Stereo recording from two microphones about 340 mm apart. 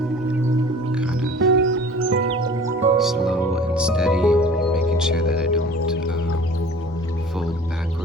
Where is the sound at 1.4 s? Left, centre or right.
Right.